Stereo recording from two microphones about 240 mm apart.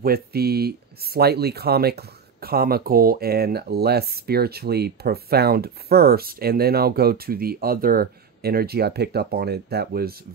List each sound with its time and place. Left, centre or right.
0.0 s speech: right